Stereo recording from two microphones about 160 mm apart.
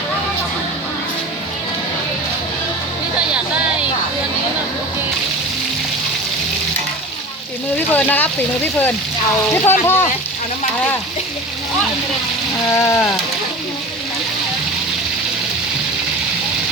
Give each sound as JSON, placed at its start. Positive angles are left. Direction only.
{"t": 7.9, "sound": "speech", "side_deg": 10}
{"t": 9.6, "sound": "speech", "side_deg": 15}
{"t": 12.7, "sound": "speech", "side_deg": 15}